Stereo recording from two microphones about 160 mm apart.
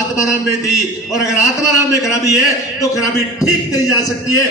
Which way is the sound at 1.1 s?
20° left (ahead or behind).